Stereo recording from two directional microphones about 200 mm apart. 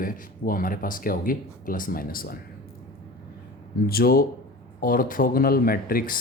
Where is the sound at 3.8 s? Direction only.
50° left (ahead or behind).